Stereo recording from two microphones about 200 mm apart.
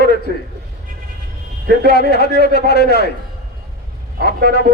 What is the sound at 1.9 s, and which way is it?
A man's voice, 55° left (ahead or behind).